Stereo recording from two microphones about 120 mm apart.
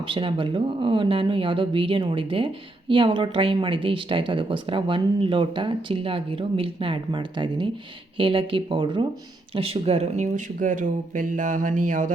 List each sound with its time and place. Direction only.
0.1 s speech: 45° right (ahead or behind); by 12.1 s 90° right